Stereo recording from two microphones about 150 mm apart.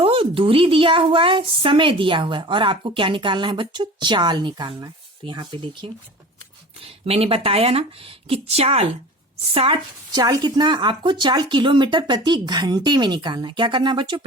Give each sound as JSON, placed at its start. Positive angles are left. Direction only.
{"t": 0.0, "sound": "a woman's voice", "side_deg": -35}
{"t": 10.1, "sound": "a woman's voice", "side_deg": -25}